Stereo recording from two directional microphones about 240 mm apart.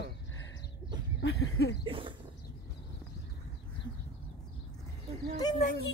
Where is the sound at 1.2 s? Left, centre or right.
Left.